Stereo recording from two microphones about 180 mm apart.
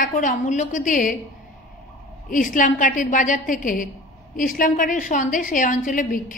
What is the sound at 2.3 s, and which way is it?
A woman's voice, 45° left (ahead or behind).